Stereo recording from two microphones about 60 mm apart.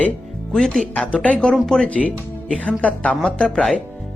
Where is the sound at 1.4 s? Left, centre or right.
Centre.